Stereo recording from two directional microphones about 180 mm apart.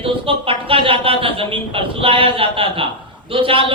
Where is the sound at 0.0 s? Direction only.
30° right (ahead or behind).